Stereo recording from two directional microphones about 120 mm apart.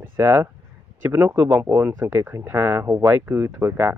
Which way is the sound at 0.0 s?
20° right (ahead or behind).